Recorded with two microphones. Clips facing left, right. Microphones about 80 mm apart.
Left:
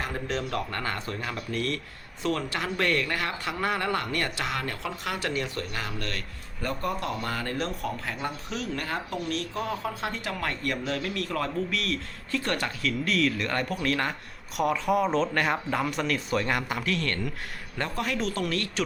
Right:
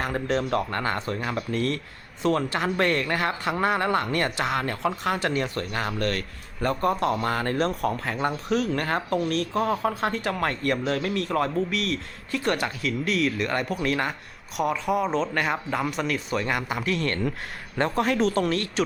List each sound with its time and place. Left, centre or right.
0.0 s speech: right